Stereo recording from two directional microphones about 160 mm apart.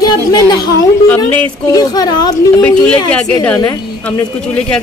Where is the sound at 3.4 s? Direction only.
10° left (ahead or behind).